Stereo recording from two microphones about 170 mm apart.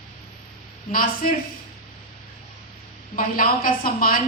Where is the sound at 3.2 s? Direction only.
55° left (ahead or behind).